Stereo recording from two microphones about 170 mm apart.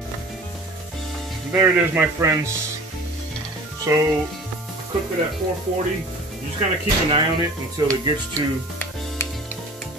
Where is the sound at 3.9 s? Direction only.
20° right (ahead or behind).